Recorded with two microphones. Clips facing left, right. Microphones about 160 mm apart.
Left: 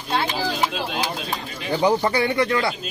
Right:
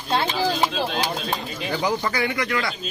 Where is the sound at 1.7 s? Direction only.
30° left (ahead or behind).